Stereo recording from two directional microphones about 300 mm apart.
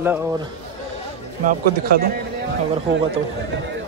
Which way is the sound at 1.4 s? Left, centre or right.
Right.